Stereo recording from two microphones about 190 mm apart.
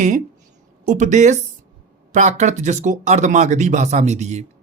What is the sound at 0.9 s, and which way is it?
Speech, 40° right (ahead or behind).